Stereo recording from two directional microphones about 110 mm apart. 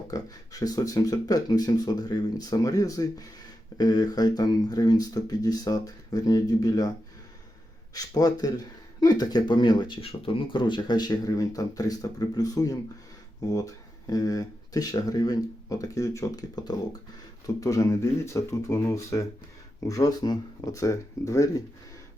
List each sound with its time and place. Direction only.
0.1 s speech: 35° left (ahead or behind)
7.9 s speech: 35° left (ahead or behind)
10.0 s speech: 60° left (ahead or behind); by 21.5 s 30° left (ahead or behind)